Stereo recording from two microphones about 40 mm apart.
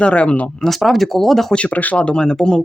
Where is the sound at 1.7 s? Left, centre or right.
Left.